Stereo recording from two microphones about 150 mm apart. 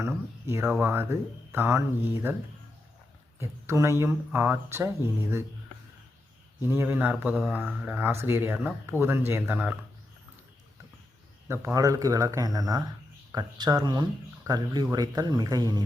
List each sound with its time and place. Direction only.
0.0 s speech: 15° right (ahead or behind)
3.4 s speech: 20° right (ahead or behind)
6.6 s speech: 15° right (ahead or behind)
11.4 s speech: 15° right (ahead or behind)